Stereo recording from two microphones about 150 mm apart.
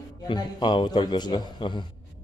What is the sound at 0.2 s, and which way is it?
A man's voice, 30° left (ahead or behind).